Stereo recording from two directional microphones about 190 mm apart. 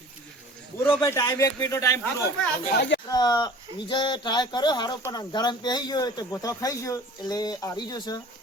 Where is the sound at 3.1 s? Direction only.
20° left (ahead or behind).